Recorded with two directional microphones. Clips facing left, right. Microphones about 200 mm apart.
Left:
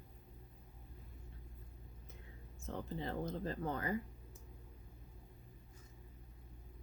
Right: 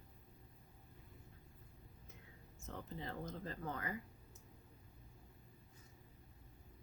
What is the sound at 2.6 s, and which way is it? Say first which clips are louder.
Speech: left 5 dB; 30° left (ahead or behind).